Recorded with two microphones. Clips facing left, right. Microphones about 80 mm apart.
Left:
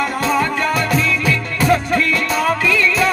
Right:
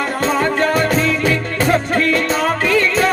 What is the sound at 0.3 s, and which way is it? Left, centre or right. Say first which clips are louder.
Music: right 3 dB; right.